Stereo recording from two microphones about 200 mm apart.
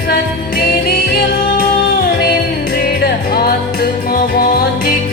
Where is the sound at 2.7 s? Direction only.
45° left (ahead or behind).